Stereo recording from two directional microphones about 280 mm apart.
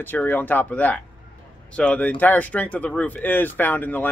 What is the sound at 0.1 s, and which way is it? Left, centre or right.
Speech, centre.